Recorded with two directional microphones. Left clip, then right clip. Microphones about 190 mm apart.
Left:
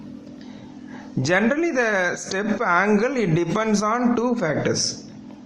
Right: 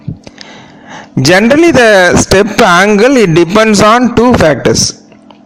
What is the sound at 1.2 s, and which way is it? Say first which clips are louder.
A man's voice: right 15 dB; 45° right (ahead or behind).